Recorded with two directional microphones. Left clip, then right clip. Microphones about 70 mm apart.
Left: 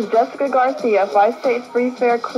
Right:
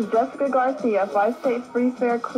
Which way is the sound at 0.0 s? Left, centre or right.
Centre.